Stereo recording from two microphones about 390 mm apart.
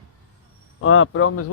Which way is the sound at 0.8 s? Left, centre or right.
Left.